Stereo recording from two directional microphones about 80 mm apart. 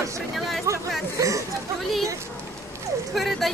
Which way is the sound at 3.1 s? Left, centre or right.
Centre.